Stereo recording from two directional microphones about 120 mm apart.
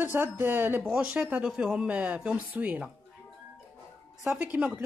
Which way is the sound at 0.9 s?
5° right (ahead or behind).